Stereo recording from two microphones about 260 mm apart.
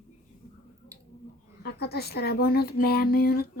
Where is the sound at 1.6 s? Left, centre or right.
Left.